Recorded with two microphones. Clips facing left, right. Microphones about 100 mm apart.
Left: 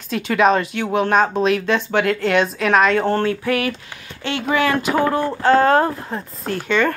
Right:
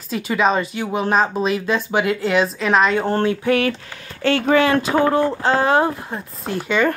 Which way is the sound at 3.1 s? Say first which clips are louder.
Right 1 dB; 20° right (ahead or behind).